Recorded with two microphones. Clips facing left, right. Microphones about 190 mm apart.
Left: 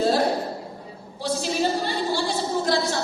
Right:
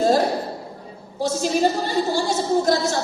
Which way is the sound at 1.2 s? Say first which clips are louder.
Right 4 dB; 45° right (ahead or behind).